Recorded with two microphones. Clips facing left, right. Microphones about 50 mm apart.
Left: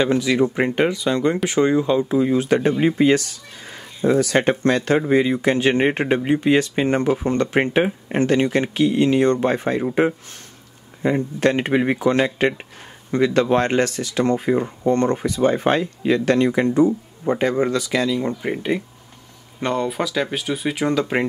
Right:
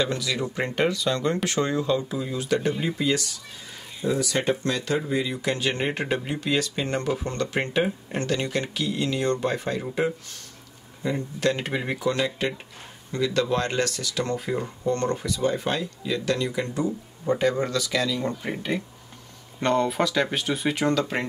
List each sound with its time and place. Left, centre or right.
0.0 s speech: left
7.0 s speech: left
7.7 s speech: left
19.6 s speech: centre